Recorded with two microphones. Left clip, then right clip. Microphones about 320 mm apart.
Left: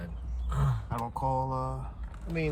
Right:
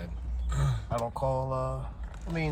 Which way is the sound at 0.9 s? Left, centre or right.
Centre.